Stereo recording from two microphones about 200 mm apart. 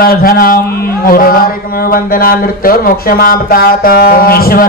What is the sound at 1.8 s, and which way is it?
Speech, 45° left (ahead or behind).